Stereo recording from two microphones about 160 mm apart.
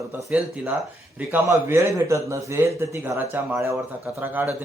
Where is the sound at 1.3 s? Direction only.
20° right (ahead or behind).